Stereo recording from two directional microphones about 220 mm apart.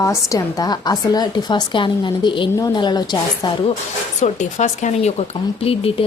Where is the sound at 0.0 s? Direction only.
15° left (ahead or behind).